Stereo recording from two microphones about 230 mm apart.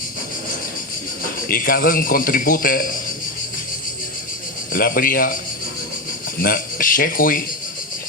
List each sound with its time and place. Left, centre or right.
1.5 s a man's voice: left
4.7 s a man's voice: left
6.4 s a man's voice: left